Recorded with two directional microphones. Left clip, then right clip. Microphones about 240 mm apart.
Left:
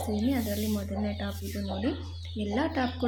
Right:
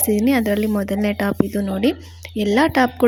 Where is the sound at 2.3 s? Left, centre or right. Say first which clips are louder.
Right 14 dB; right.